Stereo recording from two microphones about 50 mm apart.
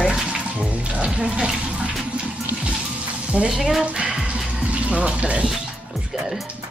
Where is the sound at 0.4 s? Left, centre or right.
Right.